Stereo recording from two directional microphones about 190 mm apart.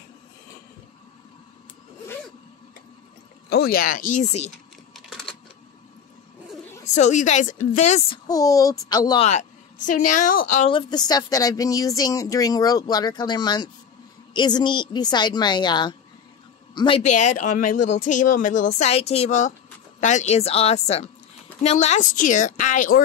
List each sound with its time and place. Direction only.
3.4 s speech: 55° left (ahead or behind); by 4.5 s 35° left (ahead or behind)
4.9 s typing: centre (ahead or behind)
6.9 s speech: 40° left (ahead or behind)
8.3 s speech: 20° left (ahead or behind)
9.8 s speech: 45° left (ahead or behind)
10.7 s speech: 25° left (ahead or behind)
17.0 s speech: 40° left (ahead or behind)